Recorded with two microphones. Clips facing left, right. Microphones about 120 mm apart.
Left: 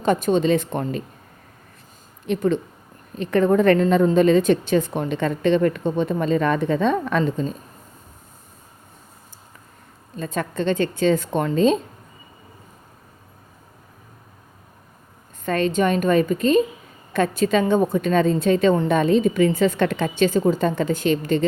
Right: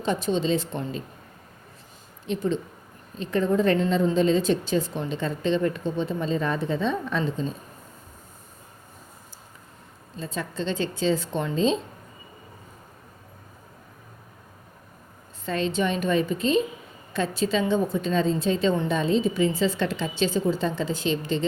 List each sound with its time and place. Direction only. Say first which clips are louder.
0.0 s a woman's voice: left 6 dB; 50° left (ahead or behind)
2.2 s a woman's voice: left 5 dB; 60° left (ahead or behind)
10.2 s a woman's voice: left 6 dB; 55° left (ahead or behind)
15.4 s a woman's voice: left 5 dB; 55° left (ahead or behind)